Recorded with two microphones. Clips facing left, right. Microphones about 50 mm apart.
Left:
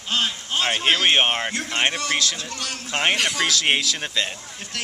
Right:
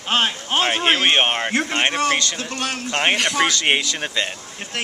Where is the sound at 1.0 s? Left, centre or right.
Centre.